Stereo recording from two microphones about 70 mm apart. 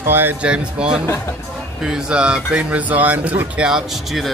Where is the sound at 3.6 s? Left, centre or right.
Centre.